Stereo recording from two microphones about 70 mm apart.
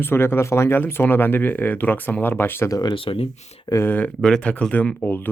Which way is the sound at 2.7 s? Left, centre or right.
Left.